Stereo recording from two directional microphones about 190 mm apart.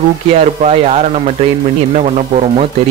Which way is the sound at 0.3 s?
35° right (ahead or behind).